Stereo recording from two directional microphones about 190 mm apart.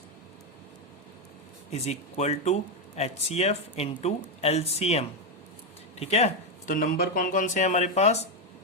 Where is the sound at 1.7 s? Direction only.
35° left (ahead or behind).